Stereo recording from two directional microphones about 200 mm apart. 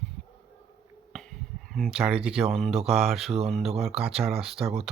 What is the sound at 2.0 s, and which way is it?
Speech, 5° right (ahead or behind).